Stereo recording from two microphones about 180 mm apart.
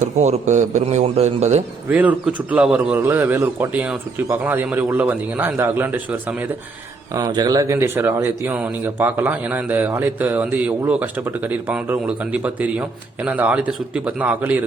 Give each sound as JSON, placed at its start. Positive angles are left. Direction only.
{"t": 0.0, "sound": "a man's voice", "side_deg": -40}
{"t": 1.9, "sound": "speech", "side_deg": -10}
{"t": 7.1, "sound": "speech", "side_deg": -20}